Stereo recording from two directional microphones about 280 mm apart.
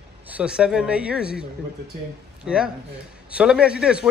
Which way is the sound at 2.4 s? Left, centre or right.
Centre.